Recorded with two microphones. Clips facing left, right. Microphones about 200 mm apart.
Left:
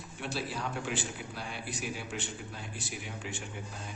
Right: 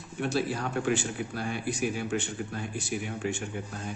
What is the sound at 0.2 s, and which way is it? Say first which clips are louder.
Speech: right 7 dB; 50° right (ahead or behind).